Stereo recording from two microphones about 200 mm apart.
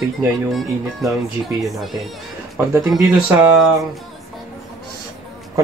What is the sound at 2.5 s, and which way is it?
Speech, 15° right (ahead or behind).